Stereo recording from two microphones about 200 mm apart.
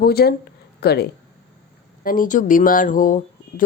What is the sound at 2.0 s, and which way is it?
Speech, 45° left (ahead or behind).